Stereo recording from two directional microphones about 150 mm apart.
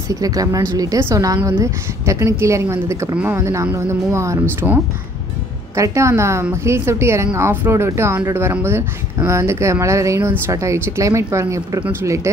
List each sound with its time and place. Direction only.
0.1 s speech: 25° right (ahead or behind)